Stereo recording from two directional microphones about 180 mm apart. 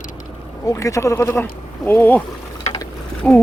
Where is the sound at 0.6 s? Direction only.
15° left (ahead or behind).